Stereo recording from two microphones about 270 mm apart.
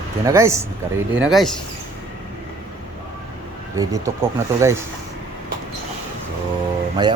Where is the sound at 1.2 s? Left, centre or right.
Centre.